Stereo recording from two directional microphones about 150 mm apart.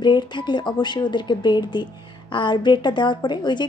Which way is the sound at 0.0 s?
30° left (ahead or behind).